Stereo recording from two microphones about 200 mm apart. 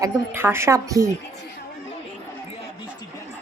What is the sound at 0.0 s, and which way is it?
Speech, 10° right (ahead or behind).